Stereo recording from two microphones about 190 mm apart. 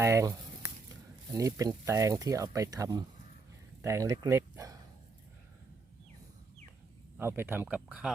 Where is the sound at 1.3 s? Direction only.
15° right (ahead or behind).